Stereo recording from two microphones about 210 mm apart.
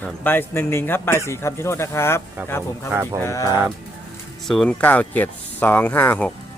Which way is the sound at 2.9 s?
10° right (ahead or behind).